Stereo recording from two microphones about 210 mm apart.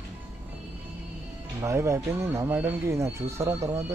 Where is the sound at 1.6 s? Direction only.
15° right (ahead or behind).